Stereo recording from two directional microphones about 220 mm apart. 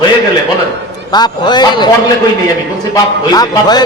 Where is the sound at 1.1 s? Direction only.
20° left (ahead or behind).